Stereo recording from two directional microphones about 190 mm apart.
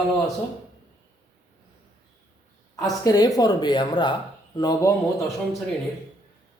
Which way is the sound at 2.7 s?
20° left (ahead or behind).